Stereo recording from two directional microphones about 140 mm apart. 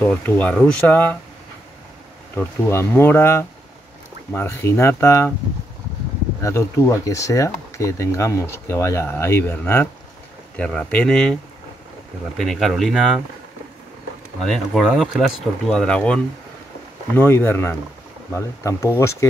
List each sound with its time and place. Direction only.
0.0 s speech: 10° left (ahead or behind)
2.3 s speech: 15° left (ahead or behind)
6.4 s speech: 20° left (ahead or behind); by 11.3 s 5° left (ahead or behind)
12.4 s speech: centre (ahead or behind)
14.4 s speech: centre (ahead or behind)
17.2 s speech: 15° left (ahead or behind)